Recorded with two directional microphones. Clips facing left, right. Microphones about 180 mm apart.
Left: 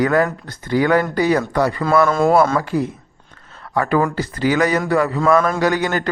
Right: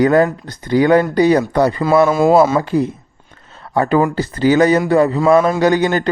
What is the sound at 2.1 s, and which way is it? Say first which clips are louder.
Speech: right 3 dB; 5° right (ahead or behind).